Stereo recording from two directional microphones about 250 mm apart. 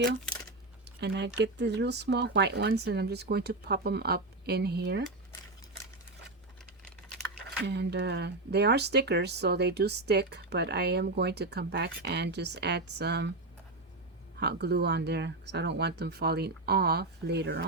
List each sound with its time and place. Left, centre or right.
0.9 s a sound: right
1.4 s speech: right
7.6 s speech: right
14.3 s speech: right